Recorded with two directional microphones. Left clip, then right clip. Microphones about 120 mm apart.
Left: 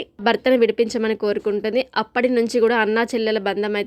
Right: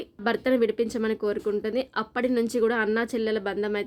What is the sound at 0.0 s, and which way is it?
A woman's voice, 30° left (ahead or behind).